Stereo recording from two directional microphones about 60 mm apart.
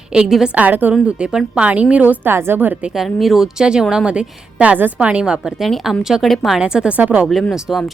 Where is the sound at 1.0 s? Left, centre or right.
Centre.